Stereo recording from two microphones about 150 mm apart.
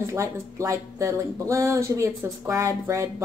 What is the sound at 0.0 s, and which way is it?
Speech, 20° right (ahead or behind).